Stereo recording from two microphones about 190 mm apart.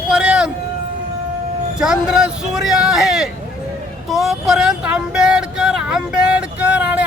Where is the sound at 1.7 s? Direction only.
5° right (ahead or behind).